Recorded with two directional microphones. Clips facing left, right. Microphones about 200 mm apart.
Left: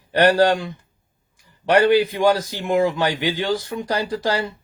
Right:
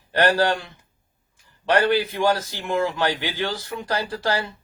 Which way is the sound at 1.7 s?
15° left (ahead or behind).